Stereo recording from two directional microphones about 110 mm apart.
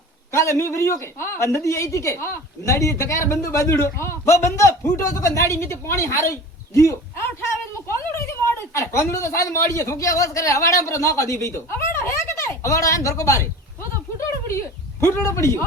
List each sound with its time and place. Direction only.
0.3 s a woman's voice: 25° left (ahead or behind)
15.0 s speech: 25° left (ahead or behind)